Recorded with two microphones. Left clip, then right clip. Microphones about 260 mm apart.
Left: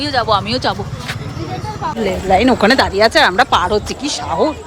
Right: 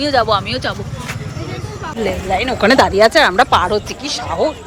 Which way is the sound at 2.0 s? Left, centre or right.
Centre.